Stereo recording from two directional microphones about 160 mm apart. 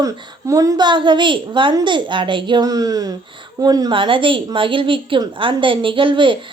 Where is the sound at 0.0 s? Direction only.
20° right (ahead or behind).